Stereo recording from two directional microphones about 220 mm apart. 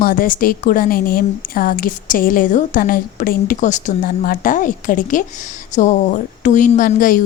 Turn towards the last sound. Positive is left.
turn(degrees=40)  # may be behind; listen again after turning